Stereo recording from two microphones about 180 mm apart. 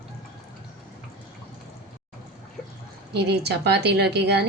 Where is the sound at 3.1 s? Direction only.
65° right (ahead or behind).